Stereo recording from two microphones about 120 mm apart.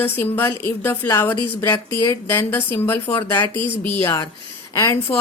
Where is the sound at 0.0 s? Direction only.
20° left (ahead or behind).